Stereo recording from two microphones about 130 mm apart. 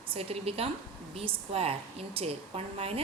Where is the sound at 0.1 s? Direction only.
50° right (ahead or behind).